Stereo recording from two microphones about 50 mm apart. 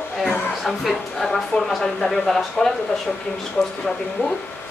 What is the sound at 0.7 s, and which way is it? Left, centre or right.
A woman's voice, centre.